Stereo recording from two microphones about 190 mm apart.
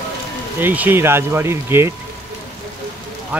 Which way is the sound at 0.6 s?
10° right (ahead or behind).